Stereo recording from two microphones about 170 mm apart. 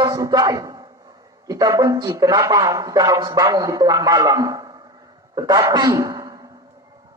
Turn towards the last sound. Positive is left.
turn(degrees=-20)  # may be behind; listen again after turning